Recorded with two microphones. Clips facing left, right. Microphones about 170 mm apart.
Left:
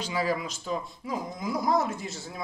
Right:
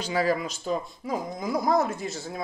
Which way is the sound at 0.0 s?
45° right (ahead or behind).